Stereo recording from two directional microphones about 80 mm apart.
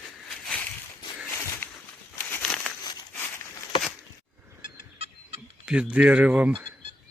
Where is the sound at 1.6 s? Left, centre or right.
Left.